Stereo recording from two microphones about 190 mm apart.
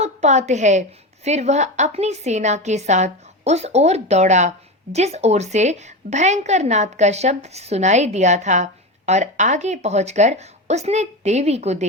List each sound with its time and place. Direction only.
0.0 s a woman's voice: 35° right (ahead or behind)